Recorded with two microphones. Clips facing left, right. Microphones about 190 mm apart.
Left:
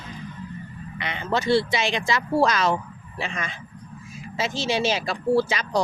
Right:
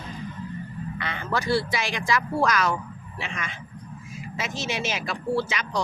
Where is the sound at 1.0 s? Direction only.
20° left (ahead or behind).